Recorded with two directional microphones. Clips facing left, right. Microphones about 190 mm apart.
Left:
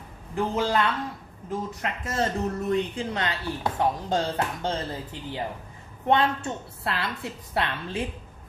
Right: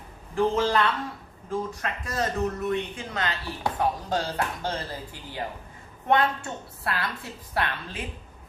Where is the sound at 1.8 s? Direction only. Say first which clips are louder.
Left 2 dB; 25° left (ahead or behind).